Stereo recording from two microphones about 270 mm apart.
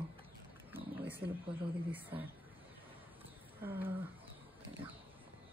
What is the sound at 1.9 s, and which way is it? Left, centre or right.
Speech, centre.